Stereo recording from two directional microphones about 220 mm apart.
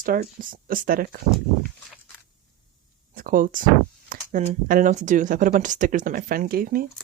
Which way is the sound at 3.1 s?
40° right (ahead or behind).